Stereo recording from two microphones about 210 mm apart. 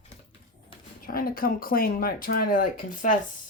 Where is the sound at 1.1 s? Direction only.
45° left (ahead or behind).